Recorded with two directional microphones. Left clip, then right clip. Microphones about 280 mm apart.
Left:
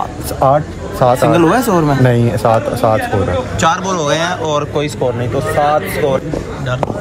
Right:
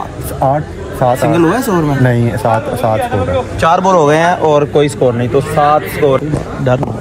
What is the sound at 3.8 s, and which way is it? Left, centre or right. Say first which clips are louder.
Speech: right 6 dB; right.